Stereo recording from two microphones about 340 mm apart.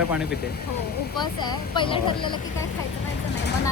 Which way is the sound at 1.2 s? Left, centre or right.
Centre.